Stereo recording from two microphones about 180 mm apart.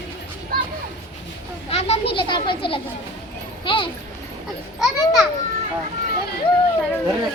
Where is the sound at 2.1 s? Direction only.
25° left (ahead or behind).